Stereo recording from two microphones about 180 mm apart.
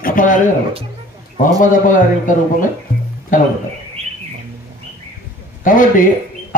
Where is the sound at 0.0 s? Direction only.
50° left (ahead or behind).